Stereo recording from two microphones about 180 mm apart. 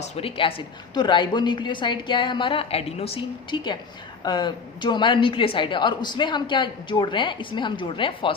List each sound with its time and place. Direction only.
0.0 s a woman's voice: 30° left (ahead or behind)